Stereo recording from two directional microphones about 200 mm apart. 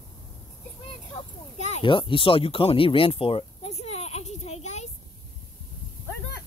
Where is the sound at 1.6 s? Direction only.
30° left (ahead or behind).